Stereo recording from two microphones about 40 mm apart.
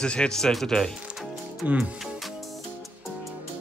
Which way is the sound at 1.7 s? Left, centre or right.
Right.